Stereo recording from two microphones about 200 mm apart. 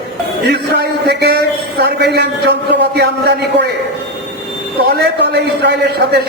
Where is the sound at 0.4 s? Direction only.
55° right (ahead or behind).